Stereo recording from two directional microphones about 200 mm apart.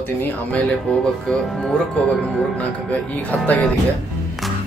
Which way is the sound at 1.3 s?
5° left (ahead or behind).